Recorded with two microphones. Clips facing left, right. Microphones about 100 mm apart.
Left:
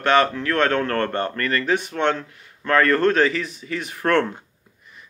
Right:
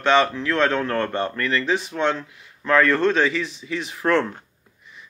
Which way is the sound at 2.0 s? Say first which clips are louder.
Even; 60° left (ahead or behind).